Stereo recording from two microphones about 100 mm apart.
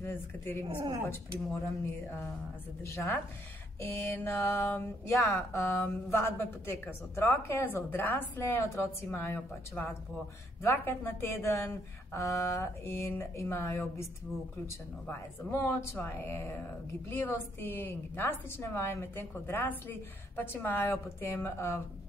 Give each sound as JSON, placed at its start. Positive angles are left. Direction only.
{"t": 0.0, "sound": "speech", "side_deg": 25}
{"t": 2.8, "sound": "speech", "side_deg": 25}
{"t": 15.0, "sound": "speech", "side_deg": 25}